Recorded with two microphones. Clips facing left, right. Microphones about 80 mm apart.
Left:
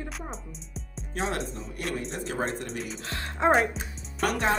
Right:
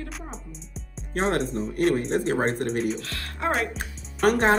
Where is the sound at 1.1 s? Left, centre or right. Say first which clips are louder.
Right 6 dB; right.